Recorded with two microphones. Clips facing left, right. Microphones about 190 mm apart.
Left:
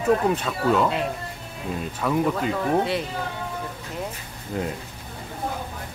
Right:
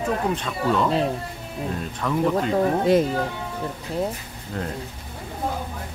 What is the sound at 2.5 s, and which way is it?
Speech, 40° right (ahead or behind).